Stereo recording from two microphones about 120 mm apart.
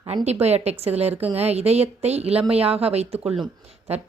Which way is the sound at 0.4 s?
60° right (ahead or behind).